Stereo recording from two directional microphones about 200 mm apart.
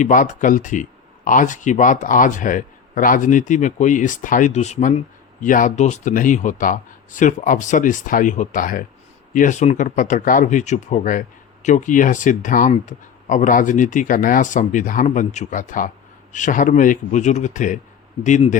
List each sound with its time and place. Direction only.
0.0 s speech: 40° left (ahead or behind)